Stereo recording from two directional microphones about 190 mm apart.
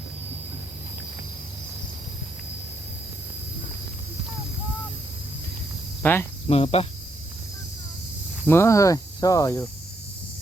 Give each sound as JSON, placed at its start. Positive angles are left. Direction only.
{"t": 6.0, "sound": "cricket", "side_deg": 10}
{"t": 6.5, "sound": "cricket", "side_deg": 30}
{"t": 8.4, "sound": "speech", "side_deg": 15}